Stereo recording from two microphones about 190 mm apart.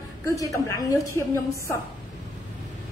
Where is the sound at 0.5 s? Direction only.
15° left (ahead or behind).